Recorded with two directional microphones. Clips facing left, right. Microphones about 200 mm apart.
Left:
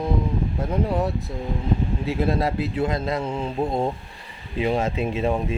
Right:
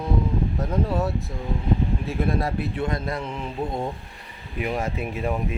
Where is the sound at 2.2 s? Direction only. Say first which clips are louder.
Left 2 dB; 25° left (ahead or behind).